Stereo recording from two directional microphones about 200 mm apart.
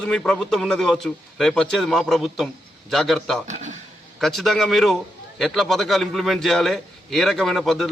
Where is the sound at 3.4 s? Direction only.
35° right (ahead or behind).